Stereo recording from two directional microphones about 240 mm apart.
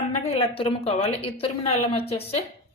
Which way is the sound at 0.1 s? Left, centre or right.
Left.